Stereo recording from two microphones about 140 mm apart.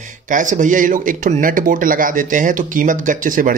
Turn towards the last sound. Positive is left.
turn(degrees=-75)  # may be behind; listen again after turning